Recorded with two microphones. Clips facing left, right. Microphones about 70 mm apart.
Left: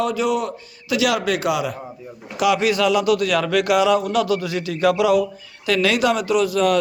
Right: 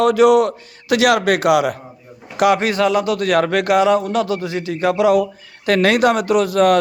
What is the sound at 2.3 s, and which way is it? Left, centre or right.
Speech, right.